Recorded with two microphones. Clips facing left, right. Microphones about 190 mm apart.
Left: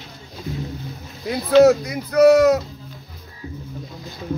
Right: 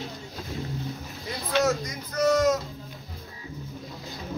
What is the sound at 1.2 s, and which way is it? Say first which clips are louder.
Speech: left 12 dB; 65° left (ahead or behind).